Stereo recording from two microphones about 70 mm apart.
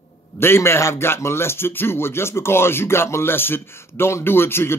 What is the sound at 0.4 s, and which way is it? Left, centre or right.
Speech, left.